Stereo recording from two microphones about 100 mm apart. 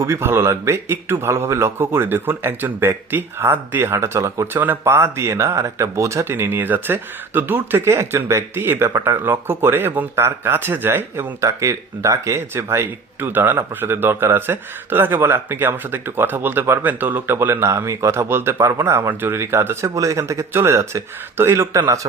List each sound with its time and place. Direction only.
0.0 s speech: 25° right (ahead or behind)